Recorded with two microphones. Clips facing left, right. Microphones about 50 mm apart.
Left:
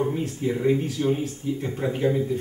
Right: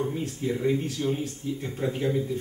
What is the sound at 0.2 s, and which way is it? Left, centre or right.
Speech, centre.